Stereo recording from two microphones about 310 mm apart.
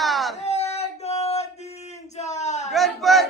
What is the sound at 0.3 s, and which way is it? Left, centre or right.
Male singing, left.